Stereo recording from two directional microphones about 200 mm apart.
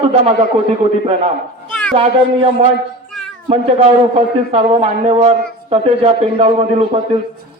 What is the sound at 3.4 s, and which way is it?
A man's voice, 30° right (ahead or behind).